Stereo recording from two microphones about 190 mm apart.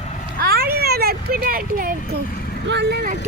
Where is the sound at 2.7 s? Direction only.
60° right (ahead or behind).